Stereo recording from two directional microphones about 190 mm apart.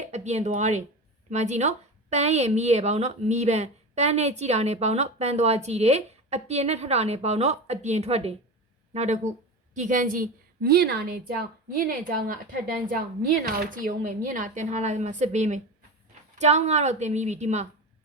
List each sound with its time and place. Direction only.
0.1 s a woman's voice: 35° right (ahead or behind)